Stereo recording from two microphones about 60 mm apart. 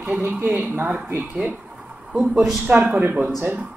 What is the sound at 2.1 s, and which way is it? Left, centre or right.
Speech, centre.